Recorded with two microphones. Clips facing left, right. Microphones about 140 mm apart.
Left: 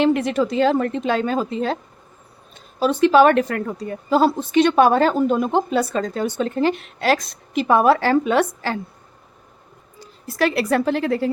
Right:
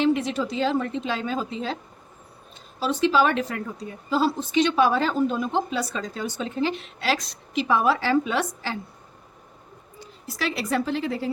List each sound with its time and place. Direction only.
0.0 s a woman's voice: 60° left (ahead or behind)
2.8 s a woman's voice: 55° left (ahead or behind)
10.2 s a woman's voice: 55° left (ahead or behind)